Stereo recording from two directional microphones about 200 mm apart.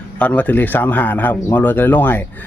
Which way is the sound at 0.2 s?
10° left (ahead or behind).